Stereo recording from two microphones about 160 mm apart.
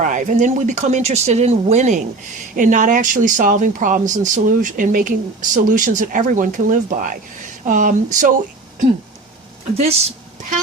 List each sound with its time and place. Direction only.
0.0 s speech: 50° right (ahead or behind)